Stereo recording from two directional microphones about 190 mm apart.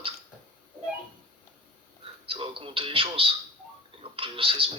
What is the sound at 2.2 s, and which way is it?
Speech, 30° right (ahead or behind).